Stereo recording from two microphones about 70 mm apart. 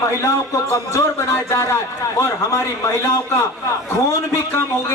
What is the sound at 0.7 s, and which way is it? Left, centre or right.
A man's voice, left.